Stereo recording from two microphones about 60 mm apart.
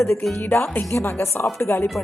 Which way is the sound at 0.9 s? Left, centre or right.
Left.